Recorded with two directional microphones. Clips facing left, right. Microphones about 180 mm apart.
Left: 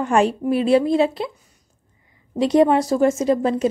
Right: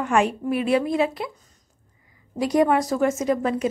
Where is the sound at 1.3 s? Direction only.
10° left (ahead or behind).